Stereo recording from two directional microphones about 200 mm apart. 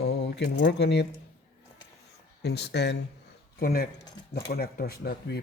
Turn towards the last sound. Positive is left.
turn(degrees=50)  # may be behind; listen again after turning